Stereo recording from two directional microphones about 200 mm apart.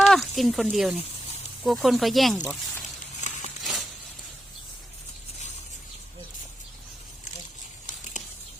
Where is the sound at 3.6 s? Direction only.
Centre (ahead or behind).